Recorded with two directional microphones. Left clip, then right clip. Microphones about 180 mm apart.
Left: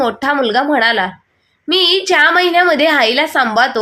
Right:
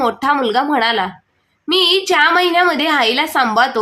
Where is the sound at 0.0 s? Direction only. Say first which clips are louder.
Left 1 dB; 5° left (ahead or behind).